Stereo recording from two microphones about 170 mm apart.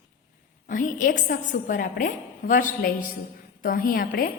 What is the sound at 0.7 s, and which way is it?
A woman's voice, 50° left (ahead or behind).